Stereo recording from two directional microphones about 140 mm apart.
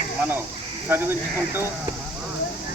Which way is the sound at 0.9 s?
15° right (ahead or behind).